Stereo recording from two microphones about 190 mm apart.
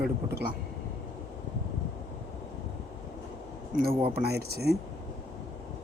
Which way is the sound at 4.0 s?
55° right (ahead or behind).